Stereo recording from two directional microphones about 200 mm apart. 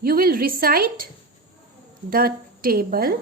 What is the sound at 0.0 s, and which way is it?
A woman's voice, 45° right (ahead or behind).